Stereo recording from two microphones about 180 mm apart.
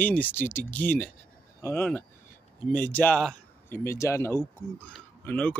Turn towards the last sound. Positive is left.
turn(degrees=10)  # may be behind; listen again after turning